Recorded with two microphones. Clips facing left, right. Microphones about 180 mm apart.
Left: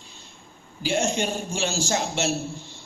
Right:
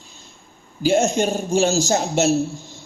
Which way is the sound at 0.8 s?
45° right (ahead or behind).